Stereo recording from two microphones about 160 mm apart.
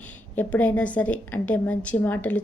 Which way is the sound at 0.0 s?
10° left (ahead or behind).